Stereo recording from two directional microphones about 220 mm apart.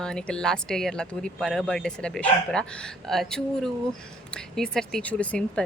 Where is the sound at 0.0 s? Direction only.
5° left (ahead or behind).